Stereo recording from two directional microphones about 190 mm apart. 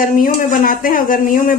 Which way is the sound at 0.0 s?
45° left (ahead or behind).